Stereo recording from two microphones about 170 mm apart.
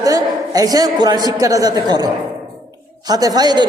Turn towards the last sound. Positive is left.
turn(degrees=-25)  # may be behind; listen again after turning